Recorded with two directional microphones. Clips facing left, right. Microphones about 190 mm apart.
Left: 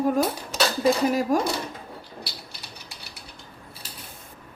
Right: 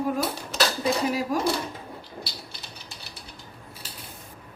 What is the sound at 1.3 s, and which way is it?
Speech, 45° left (ahead or behind).